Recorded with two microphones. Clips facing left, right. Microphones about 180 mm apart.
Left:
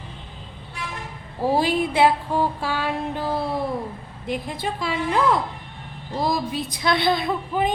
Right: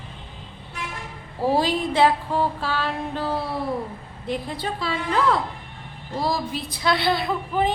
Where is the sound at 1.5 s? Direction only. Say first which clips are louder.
Left 1 dB; 10° left (ahead or behind).